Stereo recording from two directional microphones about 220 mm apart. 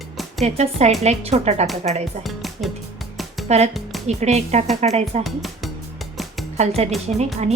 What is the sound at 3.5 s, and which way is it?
A woman's voice, 30° right (ahead or behind).